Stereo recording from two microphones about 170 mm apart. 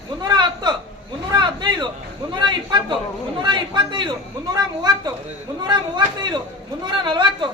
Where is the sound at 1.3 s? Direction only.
25° right (ahead or behind).